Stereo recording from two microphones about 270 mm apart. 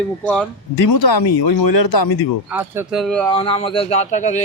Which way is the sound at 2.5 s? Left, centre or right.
Centre.